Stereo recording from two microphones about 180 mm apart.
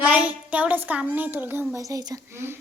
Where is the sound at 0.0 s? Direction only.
5° right (ahead or behind).